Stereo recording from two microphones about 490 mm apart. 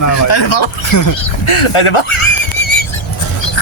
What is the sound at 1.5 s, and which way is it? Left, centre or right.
Speech, left.